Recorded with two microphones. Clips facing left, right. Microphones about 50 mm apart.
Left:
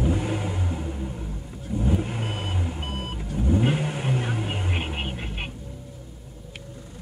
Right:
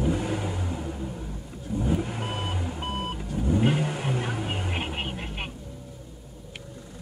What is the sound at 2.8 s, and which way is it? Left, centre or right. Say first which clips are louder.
Vehicle: right 2 dB; right.